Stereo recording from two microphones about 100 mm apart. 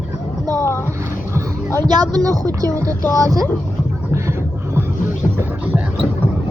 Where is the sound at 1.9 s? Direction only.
45° right (ahead or behind).